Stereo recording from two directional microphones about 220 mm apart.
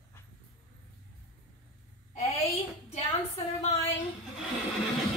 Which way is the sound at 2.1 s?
30° left (ahead or behind).